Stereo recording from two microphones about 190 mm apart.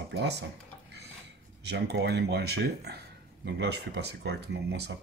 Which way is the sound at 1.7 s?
60° right (ahead or behind).